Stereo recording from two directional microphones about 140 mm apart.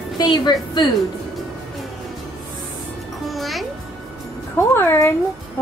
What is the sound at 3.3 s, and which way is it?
Music, centre (ahead or behind).